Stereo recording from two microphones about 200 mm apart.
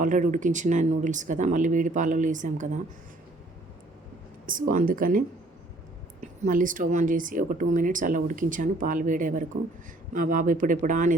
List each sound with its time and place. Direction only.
0.0 s speech: 40° right (ahead or behind)
4.7 s speech: 40° right (ahead or behind)
6.4 s speech: 40° right (ahead or behind)